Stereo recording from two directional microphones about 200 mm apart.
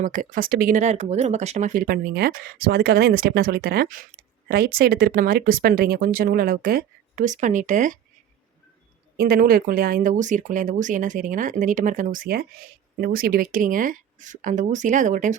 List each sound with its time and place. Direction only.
0.0 s speech: 40° right (ahead or behind)
9.1 s speech: 45° right (ahead or behind)